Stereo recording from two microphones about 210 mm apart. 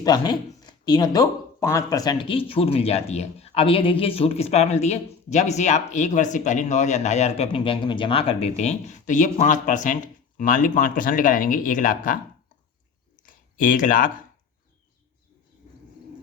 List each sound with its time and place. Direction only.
0.0 s speech: 20° left (ahead or behind); by 12.2 s 40° left (ahead or behind)
13.2 s speech: 40° left (ahead or behind)